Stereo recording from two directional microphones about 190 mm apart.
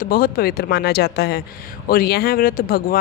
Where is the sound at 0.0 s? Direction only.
50° left (ahead or behind).